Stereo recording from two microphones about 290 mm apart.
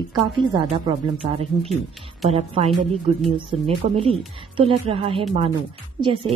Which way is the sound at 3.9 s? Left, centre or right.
Centre.